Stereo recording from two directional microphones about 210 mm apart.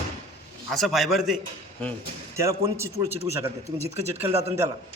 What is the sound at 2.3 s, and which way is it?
A man's voice, 15° right (ahead or behind).